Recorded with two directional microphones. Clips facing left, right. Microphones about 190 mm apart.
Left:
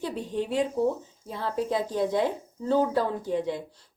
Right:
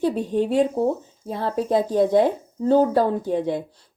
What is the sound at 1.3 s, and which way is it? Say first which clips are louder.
A woman's voice: right 6 dB; 60° right (ahead or behind).